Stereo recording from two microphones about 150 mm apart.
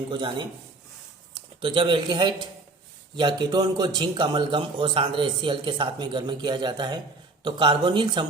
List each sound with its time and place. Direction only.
0.1 s a man's voice: 30° right (ahead or behind)